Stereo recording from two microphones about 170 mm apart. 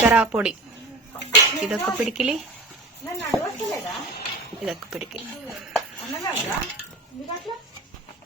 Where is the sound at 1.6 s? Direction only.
Centre (ahead or behind).